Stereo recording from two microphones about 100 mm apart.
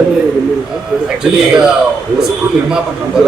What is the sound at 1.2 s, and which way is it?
A man's voice, 5° right (ahead or behind).